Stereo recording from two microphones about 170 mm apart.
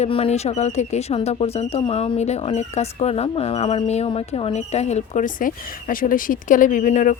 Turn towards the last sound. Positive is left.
turn(degrees=50)  # may be behind; listen again after turning